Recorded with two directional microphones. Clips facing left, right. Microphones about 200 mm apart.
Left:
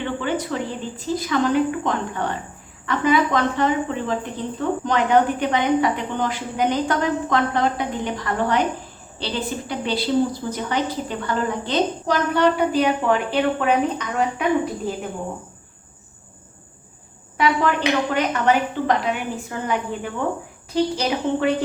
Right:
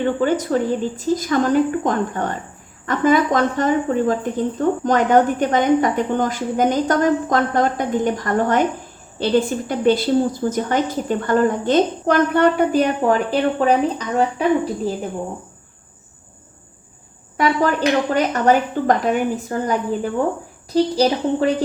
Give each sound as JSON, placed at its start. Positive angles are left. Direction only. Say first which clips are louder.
{"t": 0.2, "sound": "speech", "louder": "right 6 dB", "side_deg": -45}
{"t": 17.3, "sound": "a woman's voice", "louder": "right 2 dB", "side_deg": -40}